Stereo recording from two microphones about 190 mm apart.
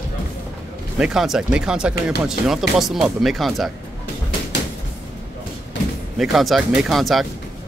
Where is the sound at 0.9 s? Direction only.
5° right (ahead or behind).